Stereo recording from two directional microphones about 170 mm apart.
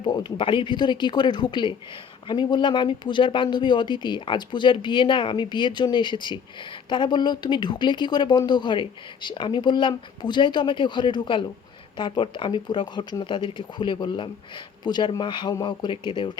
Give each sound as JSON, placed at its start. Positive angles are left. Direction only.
{"t": 0.0, "sound": "speech", "side_deg": 25}